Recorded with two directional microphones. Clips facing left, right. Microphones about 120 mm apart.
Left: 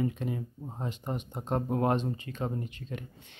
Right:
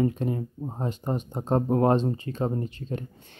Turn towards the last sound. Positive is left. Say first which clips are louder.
# right 6 dB
turn(degrees=-35)  # may be behind; listen again after turning